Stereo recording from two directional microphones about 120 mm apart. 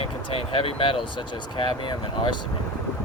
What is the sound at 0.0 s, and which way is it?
Speech, 50° left (ahead or behind).